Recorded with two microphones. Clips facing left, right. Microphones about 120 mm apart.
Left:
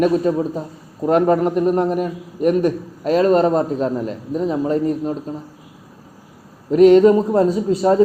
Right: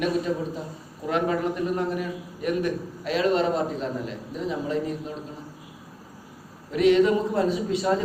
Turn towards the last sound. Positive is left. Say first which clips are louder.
# left 8 dB
turn(degrees=40)  # may be behind; listen again after turning